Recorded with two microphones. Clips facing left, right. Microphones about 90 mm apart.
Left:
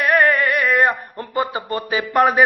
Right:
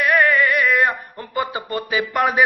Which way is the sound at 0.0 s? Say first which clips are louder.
Left 1 dB; 40° left (ahead or behind).